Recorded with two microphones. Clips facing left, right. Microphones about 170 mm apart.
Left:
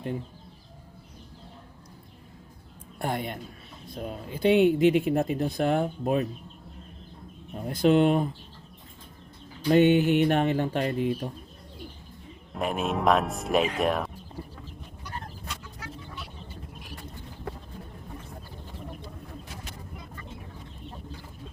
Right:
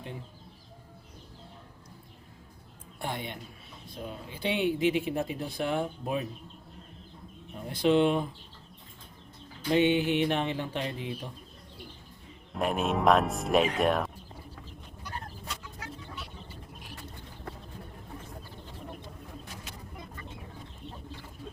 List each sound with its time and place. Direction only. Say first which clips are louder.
3.0 s speech: left 5 dB; 45° left (ahead or behind)
7.7 s speech: left 3 dB; 45° left (ahead or behind)
9.6 s speech: left 5 dB; 45° left (ahead or behind)
12.5 s speech: even; centre (ahead or behind)